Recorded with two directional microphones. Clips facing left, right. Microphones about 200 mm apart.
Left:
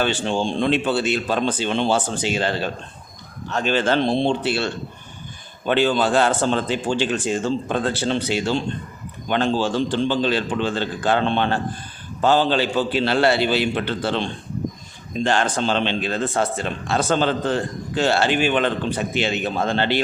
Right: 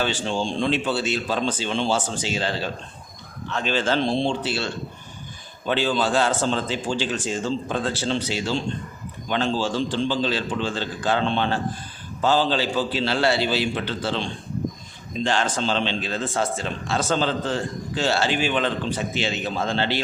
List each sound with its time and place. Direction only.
0.0 s speech: 60° left (ahead or behind)